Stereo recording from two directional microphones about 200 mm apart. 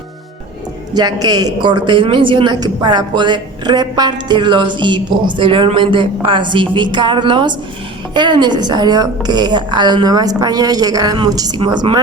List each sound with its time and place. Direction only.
0.9 s a man's voice: 20° right (ahead or behind)